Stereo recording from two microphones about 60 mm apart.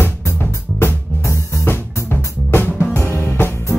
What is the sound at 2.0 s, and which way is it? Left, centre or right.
Music, left.